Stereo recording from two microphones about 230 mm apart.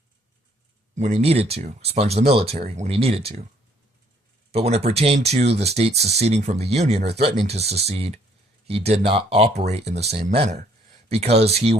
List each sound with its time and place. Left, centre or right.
0.9 s speech: right
4.5 s speech: right